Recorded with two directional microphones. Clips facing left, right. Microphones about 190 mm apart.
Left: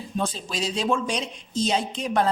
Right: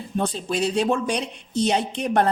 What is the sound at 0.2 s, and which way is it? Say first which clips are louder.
A woman's voice: right 5 dB; 60° right (ahead or behind).